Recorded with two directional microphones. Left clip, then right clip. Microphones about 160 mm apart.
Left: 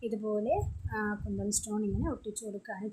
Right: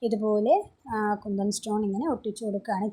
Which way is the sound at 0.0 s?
30° right (ahead or behind).